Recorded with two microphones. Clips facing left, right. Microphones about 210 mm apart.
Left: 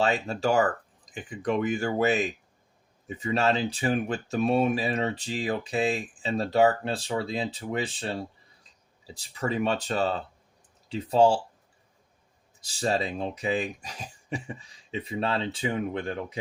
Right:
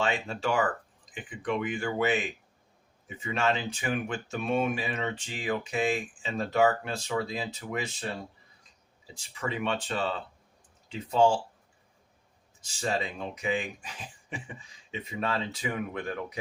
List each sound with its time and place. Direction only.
0.0 s speech: 40° left (ahead or behind)
12.5 s speech: 35° left (ahead or behind)